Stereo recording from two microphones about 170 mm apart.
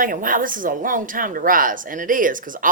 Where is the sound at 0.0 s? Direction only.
55° right (ahead or behind).